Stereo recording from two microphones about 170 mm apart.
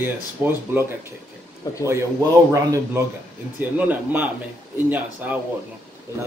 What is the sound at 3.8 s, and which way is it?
Speech, 10° right (ahead or behind).